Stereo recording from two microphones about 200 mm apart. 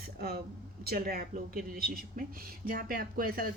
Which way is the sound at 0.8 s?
50° right (ahead or behind).